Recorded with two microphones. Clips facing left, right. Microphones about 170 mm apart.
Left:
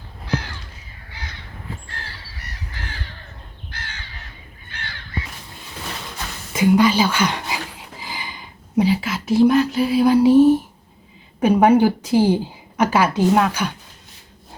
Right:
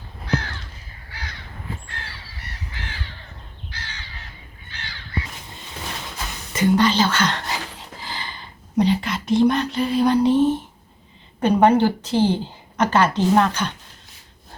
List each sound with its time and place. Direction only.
3.7 s crow: 55° left (ahead or behind)
6.5 s a woman's voice: 10° left (ahead or behind)